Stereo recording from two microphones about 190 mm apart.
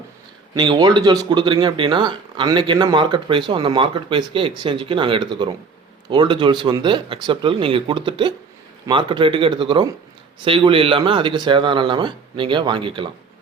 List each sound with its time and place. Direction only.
0.5 s speech: 20° right (ahead or behind)